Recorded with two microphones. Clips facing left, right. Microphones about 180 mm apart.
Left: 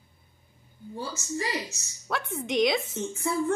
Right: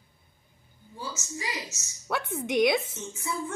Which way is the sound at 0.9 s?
60° left (ahead or behind).